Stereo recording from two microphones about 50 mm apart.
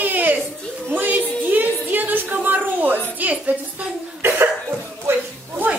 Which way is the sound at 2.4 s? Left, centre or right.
Right.